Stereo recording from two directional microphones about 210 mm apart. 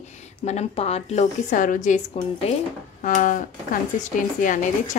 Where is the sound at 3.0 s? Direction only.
40° left (ahead or behind).